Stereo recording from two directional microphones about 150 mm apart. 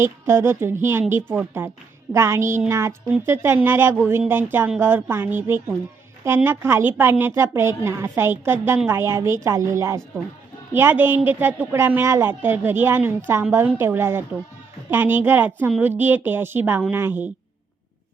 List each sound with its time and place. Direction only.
0.0 s a woman's voice: 15° right (ahead or behind)